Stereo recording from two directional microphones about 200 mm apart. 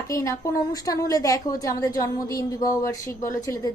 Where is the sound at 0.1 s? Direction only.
15° left (ahead or behind).